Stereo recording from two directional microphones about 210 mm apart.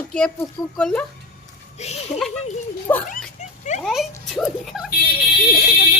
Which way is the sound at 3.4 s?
35° left (ahead or behind).